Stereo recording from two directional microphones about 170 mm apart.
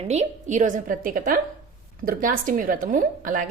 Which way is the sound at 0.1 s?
45° right (ahead or behind).